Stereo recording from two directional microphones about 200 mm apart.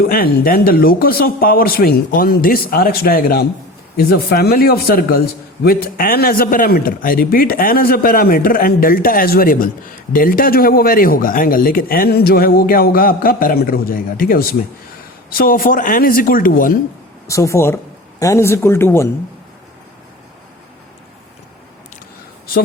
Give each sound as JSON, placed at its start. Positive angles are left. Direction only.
{"t": 0.1, "sound": "speech", "side_deg": 50}
{"t": 17.2, "sound": "speech", "side_deg": 15}